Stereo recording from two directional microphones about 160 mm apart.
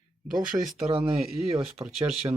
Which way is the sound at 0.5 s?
20° right (ahead or behind).